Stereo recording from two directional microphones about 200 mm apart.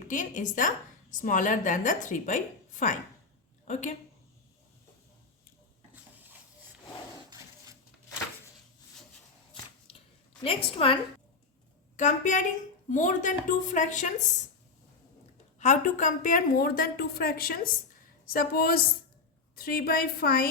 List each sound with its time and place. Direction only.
0.1 s a woman's voice: 40° left (ahead or behind)
10.4 s a woman's voice: 30° left (ahead or behind)
15.5 s a woman's voice: 35° left (ahead or behind)